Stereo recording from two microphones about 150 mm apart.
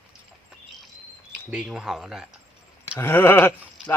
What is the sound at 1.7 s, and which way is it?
Speech, 5° right (ahead or behind).